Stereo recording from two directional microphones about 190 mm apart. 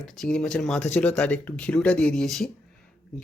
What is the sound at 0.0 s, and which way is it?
Speech, 5° left (ahead or behind).